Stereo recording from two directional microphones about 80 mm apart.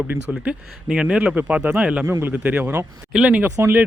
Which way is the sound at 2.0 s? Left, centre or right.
Right.